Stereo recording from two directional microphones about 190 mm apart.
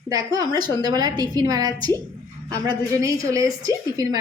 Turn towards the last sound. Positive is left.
turn(degrees=-20)  # may be behind; listen again after turning